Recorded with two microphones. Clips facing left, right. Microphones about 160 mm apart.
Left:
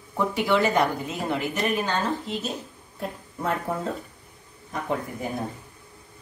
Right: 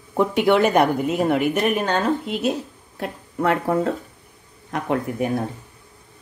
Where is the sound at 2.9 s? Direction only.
80° right.